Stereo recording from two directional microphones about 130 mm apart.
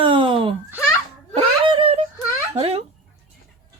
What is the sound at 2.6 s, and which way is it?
Speech, 50° right (ahead or behind).